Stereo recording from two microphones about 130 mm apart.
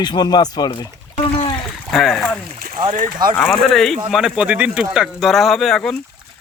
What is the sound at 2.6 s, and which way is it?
Boat, 90° right.